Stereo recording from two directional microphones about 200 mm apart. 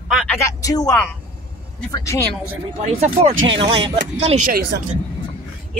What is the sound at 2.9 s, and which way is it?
Speech, 30° right (ahead or behind).